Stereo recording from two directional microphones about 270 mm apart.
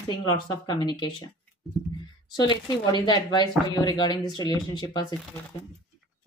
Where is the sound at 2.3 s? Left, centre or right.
Centre.